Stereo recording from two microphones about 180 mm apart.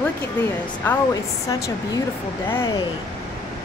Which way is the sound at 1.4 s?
20° left (ahead or behind).